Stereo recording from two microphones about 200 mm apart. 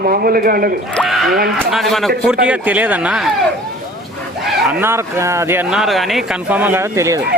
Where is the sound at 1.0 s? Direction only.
Centre (ahead or behind).